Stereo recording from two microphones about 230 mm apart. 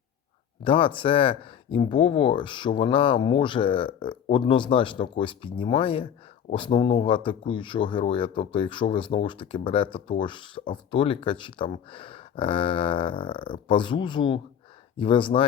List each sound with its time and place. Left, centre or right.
0.6 s speech: left